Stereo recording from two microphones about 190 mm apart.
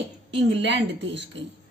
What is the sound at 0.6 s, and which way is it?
Speech, 70° right (ahead or behind).